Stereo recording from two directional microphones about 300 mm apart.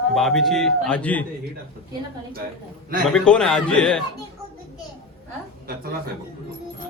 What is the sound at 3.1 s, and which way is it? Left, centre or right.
Speech, centre.